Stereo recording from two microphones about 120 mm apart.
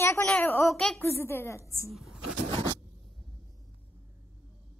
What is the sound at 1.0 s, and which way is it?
Speech, 20° left (ahead or behind).